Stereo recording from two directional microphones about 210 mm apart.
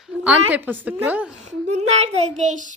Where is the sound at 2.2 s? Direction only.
35° right (ahead or behind).